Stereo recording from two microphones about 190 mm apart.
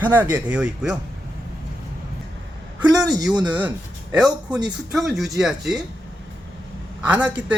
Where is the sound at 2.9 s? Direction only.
20° right (ahead or behind).